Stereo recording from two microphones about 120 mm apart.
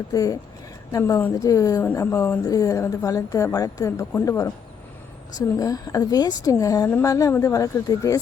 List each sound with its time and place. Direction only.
0.1 s a woman's voice: 30° left (ahead or behind)
1.9 s speech: 20° left (ahead or behind)
2.5 s a woman's voice: 30° left (ahead or behind)